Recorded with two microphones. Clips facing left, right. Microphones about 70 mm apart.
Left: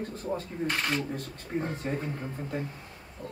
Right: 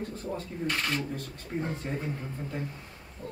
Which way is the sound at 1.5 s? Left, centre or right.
Left.